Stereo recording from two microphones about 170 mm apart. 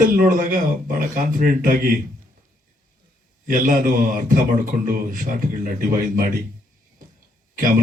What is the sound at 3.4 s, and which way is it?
Speech, 55° right (ahead or behind).